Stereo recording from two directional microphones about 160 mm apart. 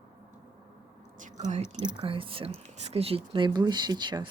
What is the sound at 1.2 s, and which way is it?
Speech, 50° right (ahead or behind).